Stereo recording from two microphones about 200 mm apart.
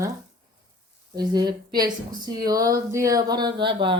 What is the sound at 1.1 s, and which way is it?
A woman's voice, 20° right (ahead or behind).